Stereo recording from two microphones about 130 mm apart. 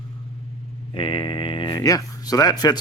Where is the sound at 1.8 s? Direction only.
25° left (ahead or behind).